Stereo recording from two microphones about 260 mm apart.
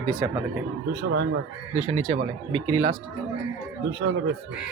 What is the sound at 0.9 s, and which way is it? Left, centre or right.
Speech, right.